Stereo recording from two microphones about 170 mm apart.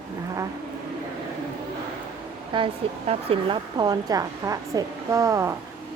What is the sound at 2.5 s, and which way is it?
A woman's voice, 30° right (ahead or behind).